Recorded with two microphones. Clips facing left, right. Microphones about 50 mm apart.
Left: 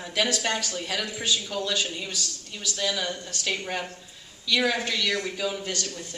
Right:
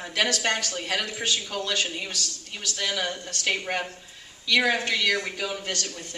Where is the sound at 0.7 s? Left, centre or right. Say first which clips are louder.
Right 2 dB; right.